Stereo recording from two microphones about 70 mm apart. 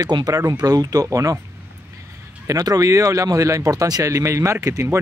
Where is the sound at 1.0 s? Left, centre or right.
Right.